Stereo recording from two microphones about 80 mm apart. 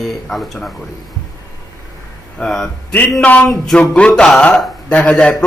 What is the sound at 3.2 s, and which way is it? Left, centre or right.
Speech, centre.